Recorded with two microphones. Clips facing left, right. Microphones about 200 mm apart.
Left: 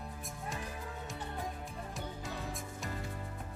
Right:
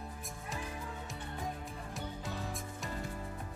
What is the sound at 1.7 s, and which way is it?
Music, centre (ahead or behind).